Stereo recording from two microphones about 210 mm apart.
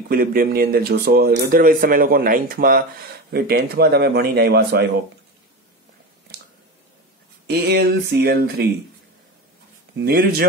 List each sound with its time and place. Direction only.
0.1 s speech: 45° right (ahead or behind)
7.4 s speech: 50° right (ahead or behind)
9.9 s speech: 45° right (ahead or behind)